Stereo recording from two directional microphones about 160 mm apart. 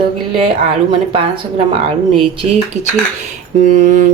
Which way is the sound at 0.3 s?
35° right (ahead or behind).